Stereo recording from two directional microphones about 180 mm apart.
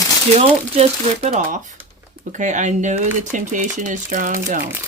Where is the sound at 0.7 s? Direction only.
40° right (ahead or behind).